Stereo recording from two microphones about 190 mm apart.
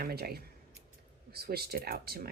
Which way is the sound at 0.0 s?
55° right (ahead or behind).